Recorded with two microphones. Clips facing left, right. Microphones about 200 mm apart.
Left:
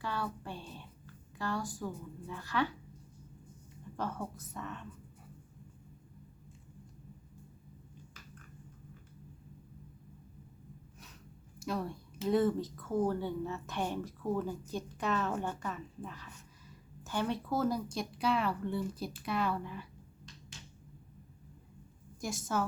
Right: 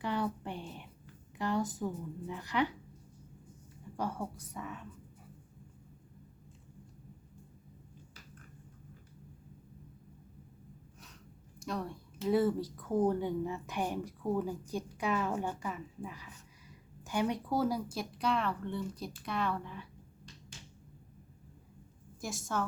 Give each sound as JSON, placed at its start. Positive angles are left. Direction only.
{"t": 0.0, "sound": "a sound", "side_deg": -20}
{"t": 3.9, "sound": "speech", "side_deg": -10}
{"t": 11.6, "sound": "speech", "side_deg": 5}
{"t": 22.2, "sound": "a woman's voice", "side_deg": 0}